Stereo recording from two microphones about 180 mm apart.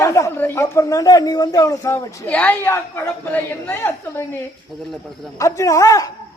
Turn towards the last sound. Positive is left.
turn(degrees=20)  # may be behind; listen again after turning